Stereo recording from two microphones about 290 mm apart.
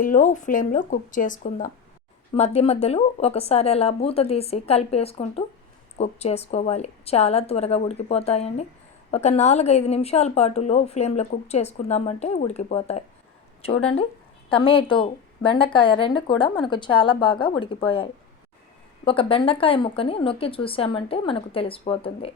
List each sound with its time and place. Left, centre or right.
0.0 s a woman's voice: left